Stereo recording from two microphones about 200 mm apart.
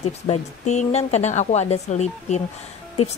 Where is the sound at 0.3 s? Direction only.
35° left (ahead or behind).